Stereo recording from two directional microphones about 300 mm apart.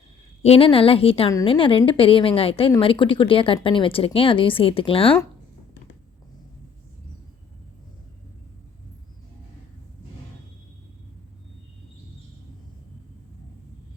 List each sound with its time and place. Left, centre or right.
0.4 s a woman's voice: centre